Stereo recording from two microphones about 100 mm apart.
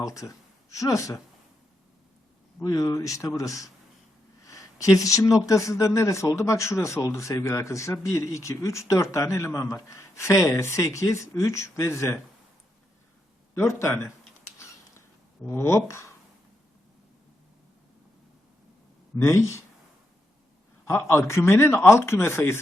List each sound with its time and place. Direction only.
0.0 s speech: 35° left (ahead or behind)
2.6 s speech: 35° left (ahead or behind)
13.6 s speech: 30° left (ahead or behind)
15.4 s speech: 25° left (ahead or behind)
19.1 s speech: 30° left (ahead or behind)
20.8 s speech: 25° left (ahead or behind)